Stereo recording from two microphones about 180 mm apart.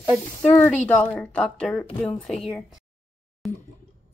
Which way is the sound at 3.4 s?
Centre (ahead or behind).